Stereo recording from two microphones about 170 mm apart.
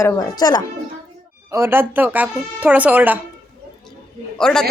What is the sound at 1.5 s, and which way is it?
Speech, 15° right (ahead or behind).